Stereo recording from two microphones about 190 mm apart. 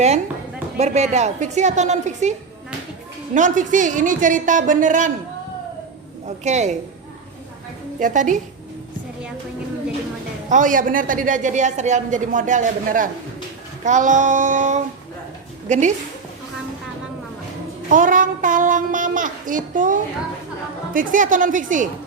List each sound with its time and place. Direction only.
0.8 s a woman's voice: 35° right (ahead or behind)
3.3 s a woman's voice: 40° right (ahead or behind)
6.2 s a woman's voice: 35° right (ahead or behind)
7.9 s a woman's voice: 40° right (ahead or behind)
10.5 s a woman's voice: 45° right (ahead or behind)
17.8 s a woman's voice: 45° right (ahead or behind)